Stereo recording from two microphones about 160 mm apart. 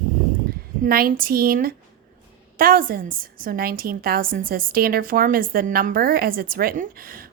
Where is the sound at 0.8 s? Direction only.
65° right (ahead or behind).